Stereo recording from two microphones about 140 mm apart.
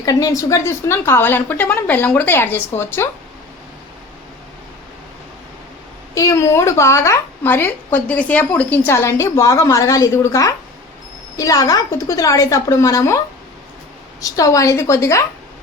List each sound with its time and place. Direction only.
0.0 s a woman's voice: 25° left (ahead or behind)
6.1 s a woman's voice: 20° left (ahead or behind)